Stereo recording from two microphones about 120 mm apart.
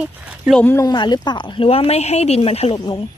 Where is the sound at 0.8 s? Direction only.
35° left (ahead or behind).